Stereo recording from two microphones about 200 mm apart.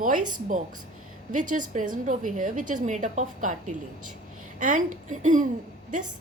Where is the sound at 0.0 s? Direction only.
40° right (ahead or behind).